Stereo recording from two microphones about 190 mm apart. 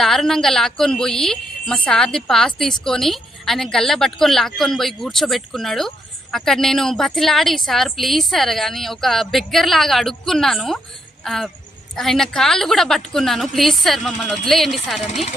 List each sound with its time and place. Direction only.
0.0 s a woman's voice: centre (ahead or behind)
15.0 s speech: 35° left (ahead or behind)